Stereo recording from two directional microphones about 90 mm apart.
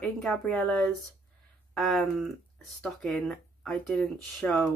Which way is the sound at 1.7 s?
Centre (ahead or behind).